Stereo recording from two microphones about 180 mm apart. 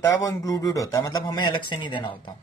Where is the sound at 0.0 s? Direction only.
20° left (ahead or behind).